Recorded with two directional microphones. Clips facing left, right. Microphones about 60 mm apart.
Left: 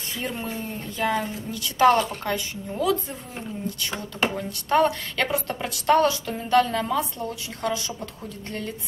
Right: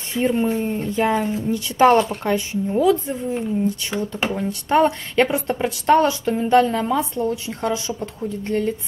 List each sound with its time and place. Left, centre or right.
0.1 s speech: right